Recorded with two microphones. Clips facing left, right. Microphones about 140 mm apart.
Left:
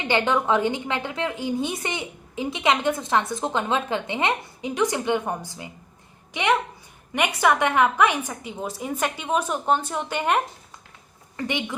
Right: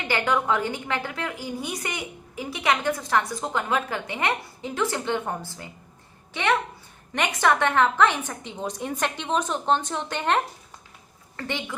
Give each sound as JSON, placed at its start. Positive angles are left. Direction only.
{"t": 0.1, "sound": "a woman's voice", "side_deg": 20}